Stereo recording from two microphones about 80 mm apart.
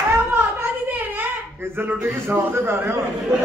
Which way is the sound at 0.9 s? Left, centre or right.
Right.